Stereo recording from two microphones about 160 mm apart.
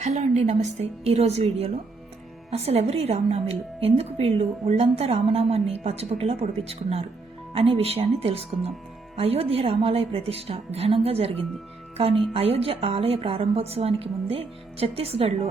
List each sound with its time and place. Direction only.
0.0 s a woman's voice: 45° right (ahead or behind)